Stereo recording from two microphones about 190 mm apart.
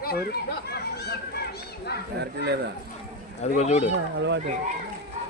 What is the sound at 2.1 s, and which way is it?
Speech, 60° right (ahead or behind).